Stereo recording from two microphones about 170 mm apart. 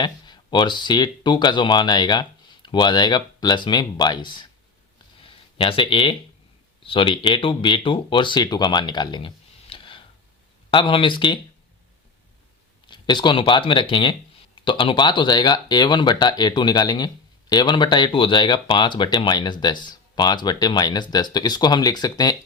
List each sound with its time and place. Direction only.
0.0 s speech: 25° left (ahead or behind)
5.2 s a sound: 30° left (ahead or behind)
6.8 s speech: 30° left (ahead or behind)
12.9 s speech: 25° left (ahead or behind)